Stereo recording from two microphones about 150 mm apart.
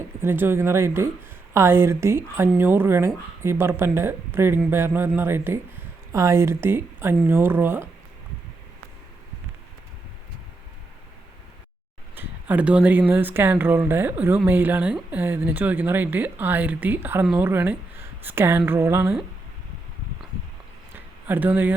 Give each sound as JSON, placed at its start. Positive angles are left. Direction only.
{"t": 0.2, "sound": "speech", "side_deg": -15}
{"t": 12.1, "sound": "speech", "side_deg": -10}
{"t": 21.2, "sound": "speech", "side_deg": -10}